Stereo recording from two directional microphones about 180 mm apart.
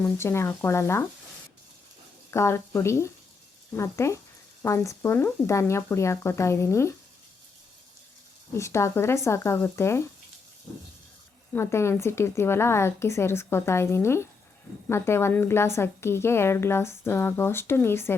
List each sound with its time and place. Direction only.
0.0 s a woman's voice: 15° left (ahead or behind)
2.3 s a woman's voice: 15° left (ahead or behind)
8.5 s a woman's voice: 15° left (ahead or behind)
11.5 s a woman's voice: 15° left (ahead or behind)